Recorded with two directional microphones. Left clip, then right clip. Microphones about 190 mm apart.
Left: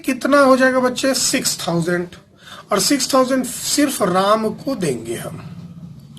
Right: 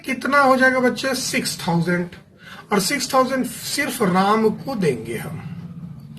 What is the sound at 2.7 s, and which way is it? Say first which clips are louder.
Speech: left 3 dB; 40° left (ahead or behind).